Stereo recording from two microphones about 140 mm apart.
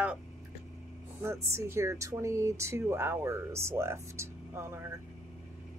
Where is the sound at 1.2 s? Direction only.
20° right (ahead or behind).